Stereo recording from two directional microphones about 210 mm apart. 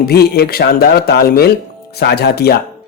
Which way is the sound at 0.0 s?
50° left (ahead or behind).